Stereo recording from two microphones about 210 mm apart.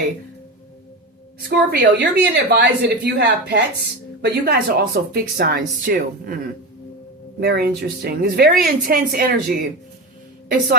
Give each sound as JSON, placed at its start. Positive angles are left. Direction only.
{"t": 1.5, "sound": "speech", "side_deg": -45}
{"t": 7.3, "sound": "speech", "side_deg": -50}